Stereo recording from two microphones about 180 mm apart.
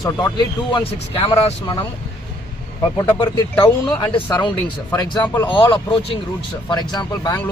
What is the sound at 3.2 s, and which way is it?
Speech, 25° left (ahead or behind).